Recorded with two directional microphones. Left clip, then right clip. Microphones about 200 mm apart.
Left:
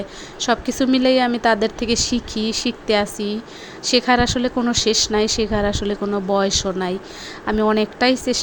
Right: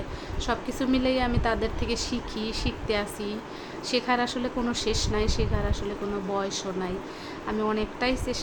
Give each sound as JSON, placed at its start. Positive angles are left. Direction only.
{"t": 0.3, "sound": "speech", "side_deg": 35}